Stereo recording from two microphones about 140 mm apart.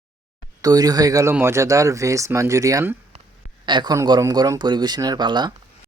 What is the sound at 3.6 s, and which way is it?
Speech, 30° right (ahead or behind).